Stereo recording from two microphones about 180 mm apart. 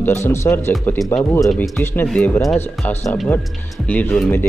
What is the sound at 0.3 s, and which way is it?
Speech, 15° left (ahead or behind).